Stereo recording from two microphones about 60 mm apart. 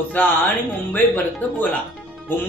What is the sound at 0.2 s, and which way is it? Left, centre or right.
Speech, left.